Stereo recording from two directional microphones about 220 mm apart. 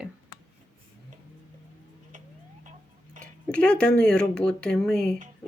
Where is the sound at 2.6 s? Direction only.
35° right (ahead or behind).